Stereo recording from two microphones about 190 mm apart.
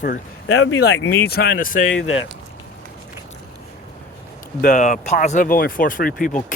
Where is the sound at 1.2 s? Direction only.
55° left (ahead or behind).